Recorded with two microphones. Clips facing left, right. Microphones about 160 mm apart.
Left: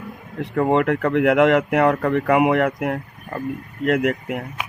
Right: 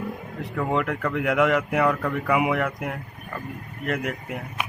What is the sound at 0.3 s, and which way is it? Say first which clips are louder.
Speech: left 7 dB; 65° left (ahead or behind).